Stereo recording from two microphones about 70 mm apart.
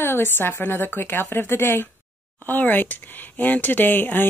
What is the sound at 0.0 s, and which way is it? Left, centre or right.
A woman's voice, left.